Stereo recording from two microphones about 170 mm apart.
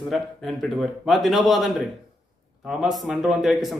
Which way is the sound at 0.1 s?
Centre (ahead or behind).